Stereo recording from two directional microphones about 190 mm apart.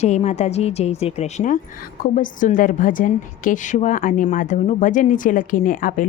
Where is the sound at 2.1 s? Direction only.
40° left (ahead or behind).